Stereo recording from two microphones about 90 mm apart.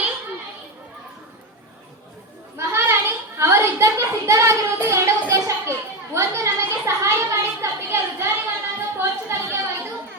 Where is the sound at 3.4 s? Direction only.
30° right (ahead or behind).